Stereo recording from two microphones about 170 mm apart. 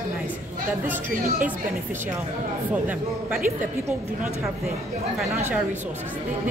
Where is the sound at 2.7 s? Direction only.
10° right (ahead or behind).